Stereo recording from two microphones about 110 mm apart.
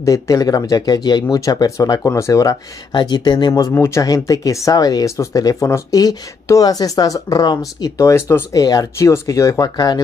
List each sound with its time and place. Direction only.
0.0 s speech: 30° left (ahead or behind)
2.9 s speech: 45° left (ahead or behind)
3.7 s speech: 25° left (ahead or behind)